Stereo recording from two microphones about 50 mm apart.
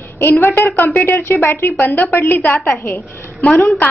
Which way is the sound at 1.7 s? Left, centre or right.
Left.